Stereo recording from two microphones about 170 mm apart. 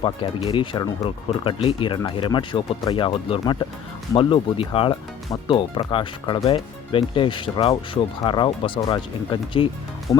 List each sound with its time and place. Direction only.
0.0 s speech: 30° left (ahead or behind)